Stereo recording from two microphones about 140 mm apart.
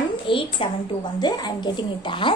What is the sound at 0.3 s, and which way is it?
A woman's voice, 40° left (ahead or behind).